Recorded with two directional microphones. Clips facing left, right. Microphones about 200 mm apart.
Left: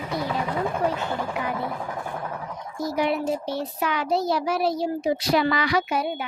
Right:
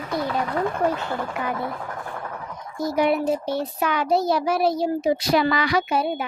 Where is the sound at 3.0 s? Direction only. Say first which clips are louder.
Right 4 dB; 50° right (ahead or behind).